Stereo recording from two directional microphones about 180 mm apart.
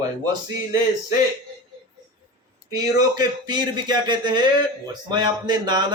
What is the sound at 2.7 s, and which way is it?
Speech, 20° right (ahead or behind).